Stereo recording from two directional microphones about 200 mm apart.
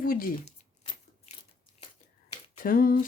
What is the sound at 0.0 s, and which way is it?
Speech, 45° left (ahead or behind).